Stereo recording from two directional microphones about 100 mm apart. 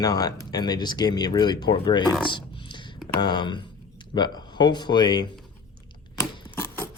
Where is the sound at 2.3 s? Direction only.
55° left (ahead or behind).